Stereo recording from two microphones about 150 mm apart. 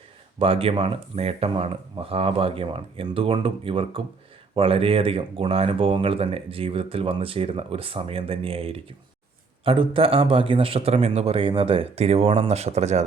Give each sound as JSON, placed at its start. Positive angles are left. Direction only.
{"t": 0.3, "sound": "speech", "side_deg": -40}